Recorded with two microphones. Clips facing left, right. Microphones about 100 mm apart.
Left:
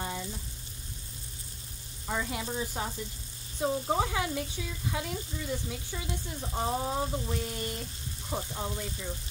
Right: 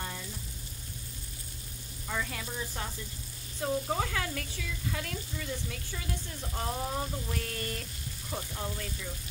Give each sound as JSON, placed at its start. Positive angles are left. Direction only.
{"t": 2.0, "sound": "sizzle", "side_deg": 20}
{"t": 3.6, "sound": "speech", "side_deg": 20}
{"t": 8.3, "sound": "sizzle", "side_deg": 20}